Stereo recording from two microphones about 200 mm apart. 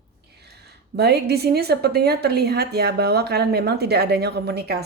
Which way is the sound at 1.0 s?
55° right (ahead or behind).